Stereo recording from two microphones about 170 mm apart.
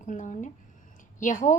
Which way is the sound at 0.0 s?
45° left (ahead or behind).